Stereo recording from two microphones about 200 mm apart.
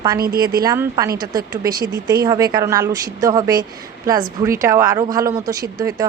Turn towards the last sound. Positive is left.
turn(degrees=-20)  # may be behind; listen again after turning